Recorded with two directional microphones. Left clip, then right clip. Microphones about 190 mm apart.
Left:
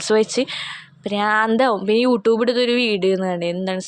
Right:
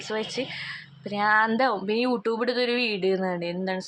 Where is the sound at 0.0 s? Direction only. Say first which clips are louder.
Left 12 dB; 45° left (ahead or behind).